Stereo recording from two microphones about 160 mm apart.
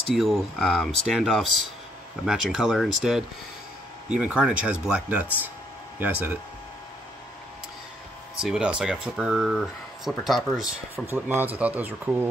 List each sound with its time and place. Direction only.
0.1 s speech: centre (ahead or behind)
8.4 s speech: 5° right (ahead or behind)
11.1 s speech: 15° right (ahead or behind)